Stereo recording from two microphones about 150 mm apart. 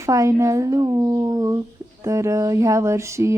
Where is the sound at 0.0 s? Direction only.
20° right (ahead or behind).